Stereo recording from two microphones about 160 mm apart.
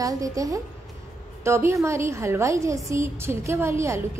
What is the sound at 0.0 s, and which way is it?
A woman's voice, 20° right (ahead or behind).